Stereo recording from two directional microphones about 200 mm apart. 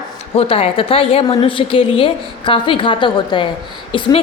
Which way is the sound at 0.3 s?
30° left (ahead or behind).